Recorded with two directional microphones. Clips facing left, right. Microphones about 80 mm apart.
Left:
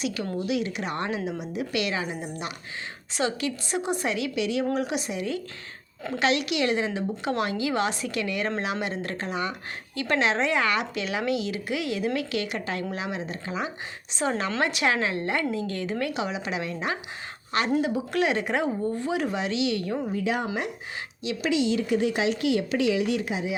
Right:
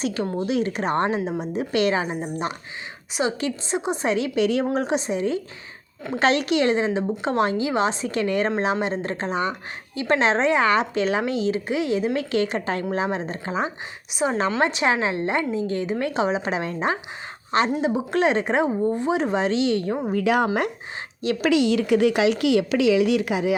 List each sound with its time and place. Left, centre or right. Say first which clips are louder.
0.0 s a woman's voice: right 4 dB; right
3.1 s a woman's voice: right 3 dB; centre; by 13.7 s right
14.1 s speech: right 4 dB; centre
14.6 s a woman's voice: right 2 dB; right
20.1 s a woman's voice: right 9 dB; right
21.2 s a woman's voice: right 5 dB; right